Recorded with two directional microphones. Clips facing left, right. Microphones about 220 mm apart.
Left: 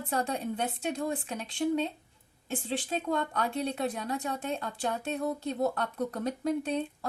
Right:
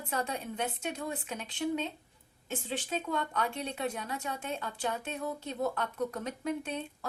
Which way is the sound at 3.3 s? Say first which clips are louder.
Left 4 dB; 35° left (ahead or behind).